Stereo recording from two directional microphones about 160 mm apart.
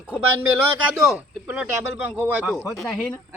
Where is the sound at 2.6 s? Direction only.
5° left (ahead or behind).